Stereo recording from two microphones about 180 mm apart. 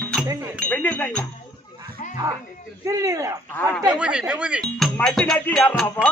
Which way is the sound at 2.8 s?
20° right (ahead or behind).